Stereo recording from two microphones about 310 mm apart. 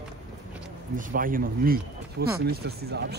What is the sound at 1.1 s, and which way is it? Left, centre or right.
Speech, right.